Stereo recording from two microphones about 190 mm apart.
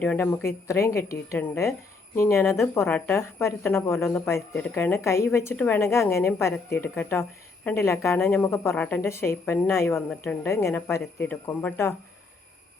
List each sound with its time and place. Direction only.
0.0 s a woman's voice: 10° left (ahead or behind)